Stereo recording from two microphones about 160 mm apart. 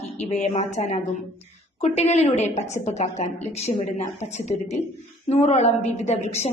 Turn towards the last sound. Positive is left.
turn(degrees=45)  # may be behind; listen again after turning